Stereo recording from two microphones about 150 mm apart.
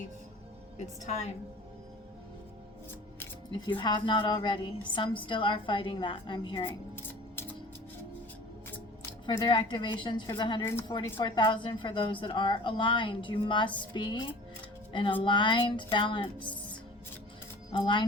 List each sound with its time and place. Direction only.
0.8 s a woman's voice: 50° left (ahead or behind)
3.5 s a woman's voice: 30° left (ahead or behind)
6.7 s a sound: 15° left (ahead or behind)
9.4 s a woman's voice: 30° left (ahead or behind)
17.7 s speech: 30° left (ahead or behind)